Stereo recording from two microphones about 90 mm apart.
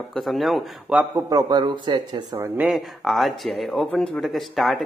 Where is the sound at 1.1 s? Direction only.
40° right (ahead or behind).